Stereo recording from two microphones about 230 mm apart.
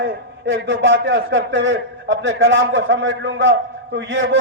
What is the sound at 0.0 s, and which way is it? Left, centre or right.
A man's voice, right.